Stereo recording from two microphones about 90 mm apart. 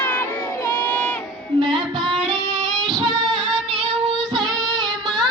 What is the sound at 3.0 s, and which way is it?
Female singing, 55° right (ahead or behind).